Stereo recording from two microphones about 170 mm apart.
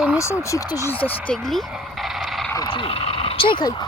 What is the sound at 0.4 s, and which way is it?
Speech, 20° left (ahead or behind).